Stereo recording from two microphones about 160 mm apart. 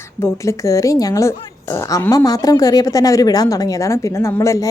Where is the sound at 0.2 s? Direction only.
15° left (ahead or behind).